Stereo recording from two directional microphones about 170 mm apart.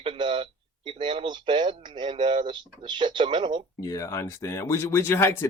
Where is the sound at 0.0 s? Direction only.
30° right (ahead or behind).